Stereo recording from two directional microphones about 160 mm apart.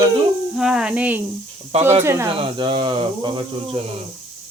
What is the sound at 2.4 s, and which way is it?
Speech, 30° right (ahead or behind).